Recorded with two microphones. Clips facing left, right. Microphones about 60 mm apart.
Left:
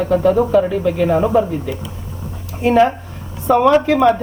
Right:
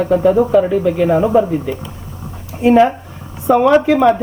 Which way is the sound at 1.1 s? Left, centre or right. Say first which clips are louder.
Right 2 dB; centre.